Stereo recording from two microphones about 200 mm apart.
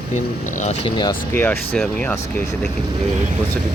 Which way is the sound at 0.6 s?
30° left (ahead or behind).